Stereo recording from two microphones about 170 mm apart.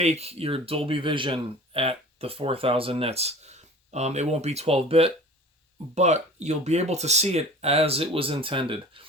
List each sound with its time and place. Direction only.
0.0 s speech: 40° right (ahead or behind)